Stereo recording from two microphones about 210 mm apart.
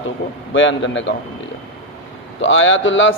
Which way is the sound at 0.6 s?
60° left (ahead or behind).